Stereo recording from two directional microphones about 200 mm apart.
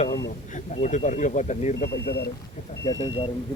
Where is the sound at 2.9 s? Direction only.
25° left (ahead or behind).